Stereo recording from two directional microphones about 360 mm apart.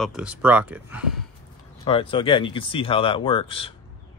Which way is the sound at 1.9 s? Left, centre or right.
Centre.